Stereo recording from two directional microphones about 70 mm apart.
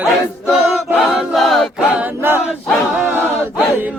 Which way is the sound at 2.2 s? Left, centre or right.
Right.